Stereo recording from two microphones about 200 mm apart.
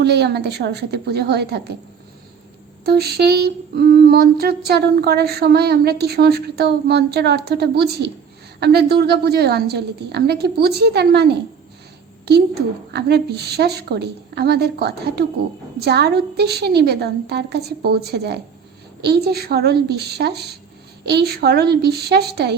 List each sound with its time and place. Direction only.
0.0 s a woman's voice: 55° right (ahead or behind)
2.8 s humming: 50° right (ahead or behind)
8.6 s a woman's voice: 55° right (ahead or behind)
12.3 s humming: 55° right (ahead or behind)
12.9 s a woman's voice: 55° right (ahead or behind)
21.0 s humming: 55° right (ahead or behind)